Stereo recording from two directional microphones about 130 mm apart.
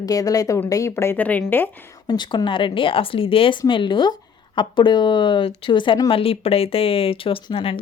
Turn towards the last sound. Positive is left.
turn(degrees=45)  # may be behind; listen again after turning